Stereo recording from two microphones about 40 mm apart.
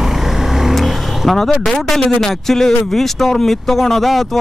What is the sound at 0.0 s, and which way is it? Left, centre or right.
Vehicle, centre.